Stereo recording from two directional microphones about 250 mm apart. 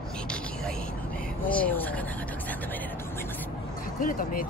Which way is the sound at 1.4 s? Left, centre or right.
Centre.